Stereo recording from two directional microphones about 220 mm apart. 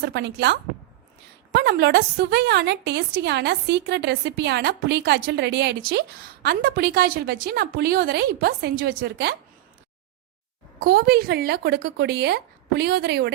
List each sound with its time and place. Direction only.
0.0 s a woman's voice: 50° right (ahead or behind)
10.8 s a woman's voice: 45° right (ahead or behind)